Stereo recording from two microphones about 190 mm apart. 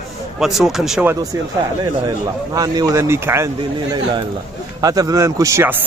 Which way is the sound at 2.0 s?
20° right (ahead or behind).